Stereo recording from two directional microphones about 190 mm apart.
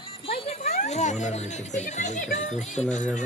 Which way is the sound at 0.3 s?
35° left (ahead or behind).